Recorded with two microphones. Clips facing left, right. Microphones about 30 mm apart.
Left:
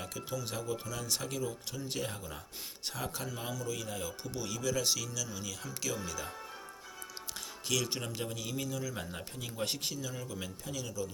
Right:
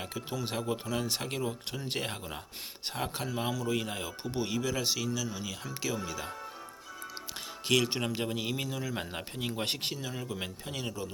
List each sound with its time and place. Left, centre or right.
0.0 s speech: right
2.8 s speech: right
3.6 s speech: right
7.7 s speech: right